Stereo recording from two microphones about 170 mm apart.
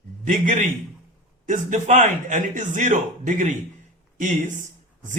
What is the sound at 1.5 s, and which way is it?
Speech, 45° right (ahead or behind).